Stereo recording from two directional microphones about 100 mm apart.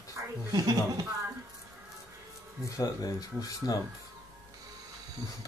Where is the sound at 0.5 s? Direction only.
40° right (ahead or behind).